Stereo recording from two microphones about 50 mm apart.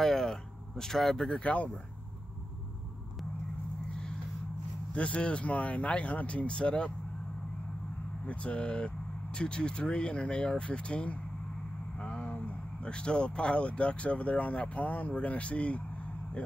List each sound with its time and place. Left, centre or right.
0.0 s speech: centre
1.4 s speech: left
4.9 s speech: left
8.3 s speech: left
12.0 s vehicle: left
12.9 s speech: centre